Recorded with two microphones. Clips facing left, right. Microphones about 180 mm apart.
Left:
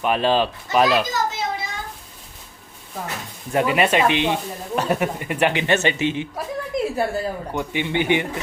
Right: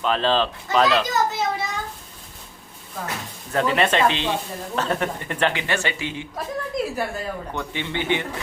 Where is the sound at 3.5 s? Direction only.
10° left (ahead or behind).